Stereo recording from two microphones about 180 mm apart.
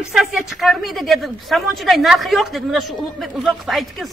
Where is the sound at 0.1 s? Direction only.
Centre (ahead or behind).